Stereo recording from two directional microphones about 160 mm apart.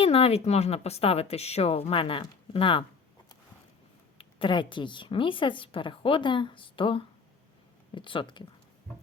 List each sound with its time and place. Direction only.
0.0 s a woman's voice: 35° left (ahead or behind)
4.2 s a woman's voice: 30° left (ahead or behind)